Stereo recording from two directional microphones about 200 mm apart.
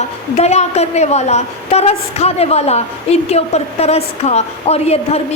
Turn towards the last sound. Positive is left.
turn(degrees=30)  # may be behind; listen again after turning